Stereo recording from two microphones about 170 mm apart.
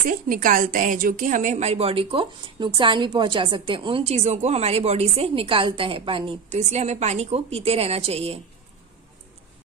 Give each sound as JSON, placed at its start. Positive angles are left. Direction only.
{"t": 0.1, "sound": "a woman's voice", "side_deg": -55}